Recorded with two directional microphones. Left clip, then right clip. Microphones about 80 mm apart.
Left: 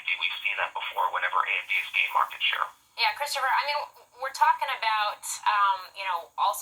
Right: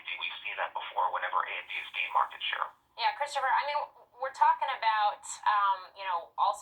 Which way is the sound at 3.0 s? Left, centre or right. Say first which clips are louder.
Left 4 dB; left.